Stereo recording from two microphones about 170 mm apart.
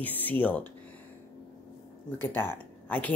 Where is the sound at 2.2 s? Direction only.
15° left (ahead or behind).